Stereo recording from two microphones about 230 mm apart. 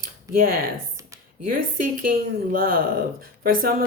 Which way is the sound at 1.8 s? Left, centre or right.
Right.